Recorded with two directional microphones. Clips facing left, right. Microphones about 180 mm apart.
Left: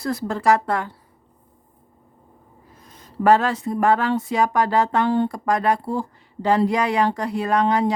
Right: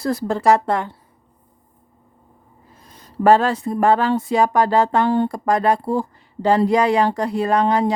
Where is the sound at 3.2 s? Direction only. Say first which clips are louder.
Right 2 dB; 30° right (ahead or behind).